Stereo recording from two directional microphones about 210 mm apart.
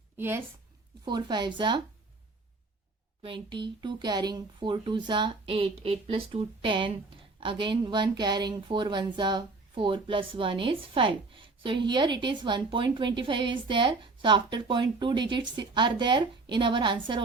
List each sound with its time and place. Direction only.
0.2 s a woman's voice: 10° right (ahead or behind)
1.0 s speech: 20° right (ahead or behind)
3.2 s speech: 25° right (ahead or behind)